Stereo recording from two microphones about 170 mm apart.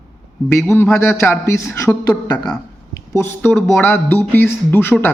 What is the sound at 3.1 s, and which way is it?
Speech, 15° left (ahead or behind).